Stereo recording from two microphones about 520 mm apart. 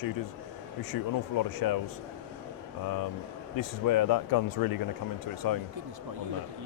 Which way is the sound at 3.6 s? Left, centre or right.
Left.